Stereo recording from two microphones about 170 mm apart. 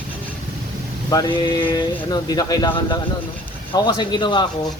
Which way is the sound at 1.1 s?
25° left (ahead or behind).